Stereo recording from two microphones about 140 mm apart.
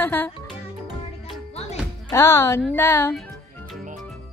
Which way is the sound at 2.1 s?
20° left (ahead or behind).